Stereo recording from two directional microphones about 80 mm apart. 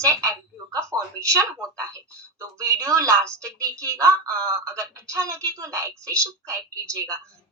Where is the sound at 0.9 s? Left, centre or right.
Right.